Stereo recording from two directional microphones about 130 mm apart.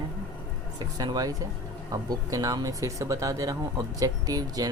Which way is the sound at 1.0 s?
30° right (ahead or behind).